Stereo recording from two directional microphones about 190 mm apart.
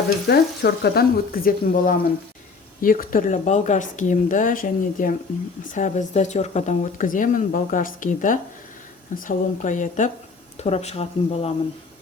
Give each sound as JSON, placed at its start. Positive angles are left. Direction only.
{"t": 0.3, "sound": "speech", "side_deg": 55}